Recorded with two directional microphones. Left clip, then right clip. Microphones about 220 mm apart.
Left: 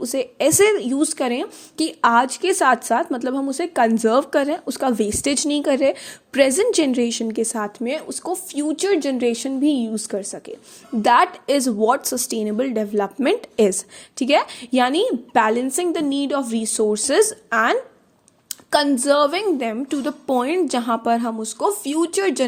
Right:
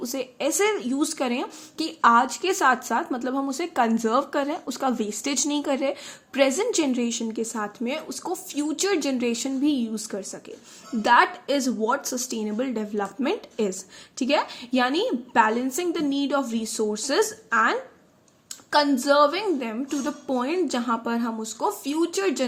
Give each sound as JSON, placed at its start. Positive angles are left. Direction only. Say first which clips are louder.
{"t": 0.0, "sound": "a woman's voice", "louder": "left 8 dB", "side_deg": 30}